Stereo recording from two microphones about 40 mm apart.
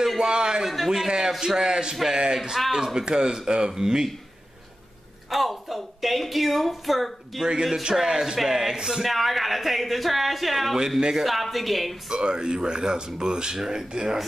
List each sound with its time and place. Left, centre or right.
0.0 s a sound: centre
0.3 s speech: centre
0.7 s speech: centre
0.9 s speech: centre
5.3 s speech: centre
8.1 s speech: centre
9.0 s speech: centre
11.0 s speech: centre
11.2 s speech: centre
12.1 s speech: right